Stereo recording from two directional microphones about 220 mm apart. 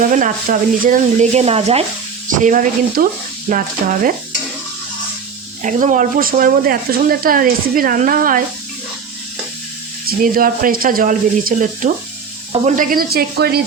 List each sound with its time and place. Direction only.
0.0 s speech: 35° right (ahead or behind)
5.6 s speech: 35° right (ahead or behind)
10.1 s speech: 40° right (ahead or behind)